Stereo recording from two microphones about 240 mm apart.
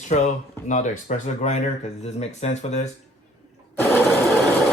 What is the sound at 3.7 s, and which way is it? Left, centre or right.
Sewing machine, centre.